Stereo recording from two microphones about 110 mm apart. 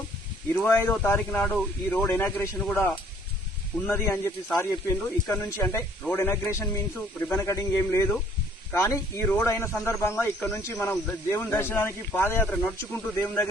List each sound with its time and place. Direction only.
0.5 s a man's voice: 20° left (ahead or behind)
2.6 s a man's voice: 10° left (ahead or behind)
9.2 s a man's voice: 15° left (ahead or behind)